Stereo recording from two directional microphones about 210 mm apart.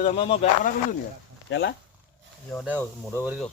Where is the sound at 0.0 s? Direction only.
30° left (ahead or behind).